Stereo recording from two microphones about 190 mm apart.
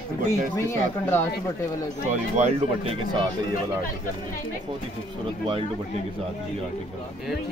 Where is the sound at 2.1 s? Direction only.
35° right (ahead or behind).